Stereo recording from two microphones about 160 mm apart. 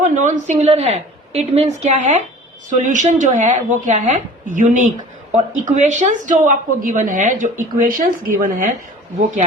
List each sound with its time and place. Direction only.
0.0 s a woman's voice: 50° right (ahead or behind)
0.6 s a woman's voice: 40° right (ahead or behind); by 8.7 s 55° right (ahead or behind)